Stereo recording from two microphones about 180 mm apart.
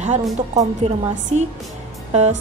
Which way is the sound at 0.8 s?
35° right (ahead or behind).